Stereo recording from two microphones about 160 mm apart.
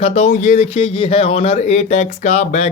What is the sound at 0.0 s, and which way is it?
A man's voice, 45° left (ahead or behind).